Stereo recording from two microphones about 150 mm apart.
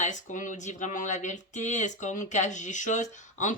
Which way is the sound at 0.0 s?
55° left (ahead or behind).